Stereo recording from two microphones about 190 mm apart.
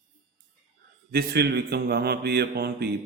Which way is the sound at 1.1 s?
55° right (ahead or behind).